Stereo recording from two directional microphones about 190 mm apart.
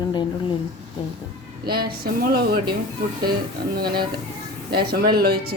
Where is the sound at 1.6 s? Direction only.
55° right (ahead or behind).